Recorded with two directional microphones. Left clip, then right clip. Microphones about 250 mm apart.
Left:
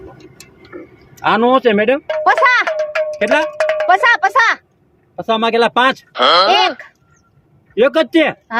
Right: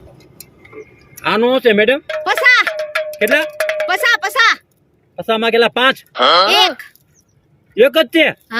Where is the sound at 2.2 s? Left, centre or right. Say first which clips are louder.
Even; right.